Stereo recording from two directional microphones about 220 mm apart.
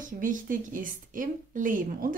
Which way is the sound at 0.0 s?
35° right (ahead or behind).